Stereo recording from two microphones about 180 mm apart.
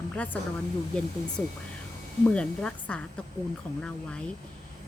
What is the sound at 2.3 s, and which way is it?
Speech, 5° left (ahead or behind).